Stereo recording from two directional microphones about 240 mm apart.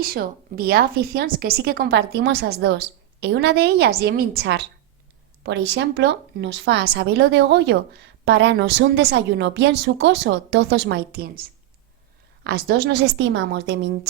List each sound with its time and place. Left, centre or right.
0.0 s a woman's voice: right
12.5 s a woman's voice: right